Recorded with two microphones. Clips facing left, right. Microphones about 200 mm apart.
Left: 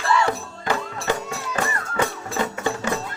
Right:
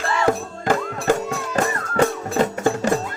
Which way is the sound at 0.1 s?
45° right (ahead or behind).